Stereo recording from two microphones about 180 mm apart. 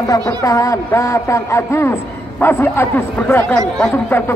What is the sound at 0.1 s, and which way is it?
A man's voice, 20° left (ahead or behind).